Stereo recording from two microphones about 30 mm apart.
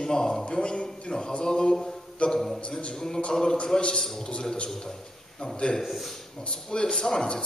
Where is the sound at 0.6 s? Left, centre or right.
Left.